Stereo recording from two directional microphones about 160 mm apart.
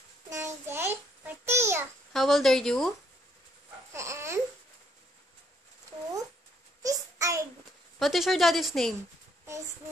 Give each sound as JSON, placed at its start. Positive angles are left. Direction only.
{"t": 0.3, "sound": "a sound", "side_deg": -15}
{"t": 2.1, "sound": "a woman's voice", "side_deg": 0}
{"t": 3.9, "sound": "babbling", "side_deg": -15}
{"t": 6.8, "sound": "child singing", "side_deg": -20}
{"t": 8.0, "sound": "a woman's voice", "side_deg": 0}